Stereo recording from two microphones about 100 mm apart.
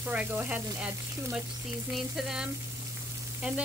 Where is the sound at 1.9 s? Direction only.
5° right (ahead or behind).